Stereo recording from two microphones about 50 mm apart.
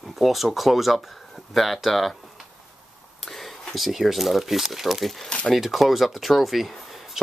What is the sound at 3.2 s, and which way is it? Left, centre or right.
Speech, centre.